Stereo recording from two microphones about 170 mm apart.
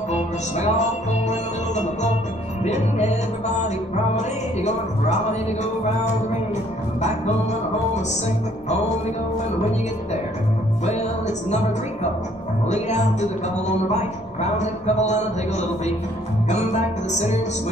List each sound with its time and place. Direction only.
0.1 s music: 40° left (ahead or behind)
2.6 s speech: 40° left (ahead or behind)
3.6 s music: 45° left (ahead or behind)
10.9 s music: 40° left (ahead or behind)
12.6 s speech: 40° left (ahead or behind)